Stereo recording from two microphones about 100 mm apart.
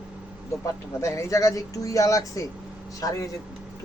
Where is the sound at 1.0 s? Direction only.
30° left (ahead or behind).